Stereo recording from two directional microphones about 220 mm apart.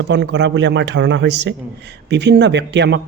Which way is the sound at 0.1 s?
50° right (ahead or behind).